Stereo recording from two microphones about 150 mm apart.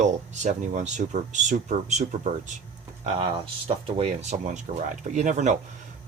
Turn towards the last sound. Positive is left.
turn(degrees=-55)  # may be behind; listen again after turning